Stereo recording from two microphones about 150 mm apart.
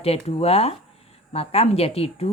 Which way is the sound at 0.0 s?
40° left (ahead or behind).